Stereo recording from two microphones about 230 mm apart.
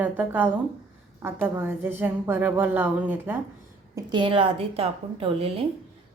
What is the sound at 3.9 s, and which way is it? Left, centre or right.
A woman's voice, right.